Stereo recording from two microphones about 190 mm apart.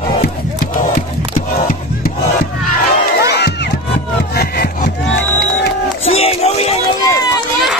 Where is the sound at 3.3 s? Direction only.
60° left (ahead or behind).